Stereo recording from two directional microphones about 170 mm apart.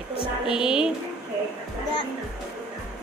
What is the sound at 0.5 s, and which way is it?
Music, 5° right (ahead or behind).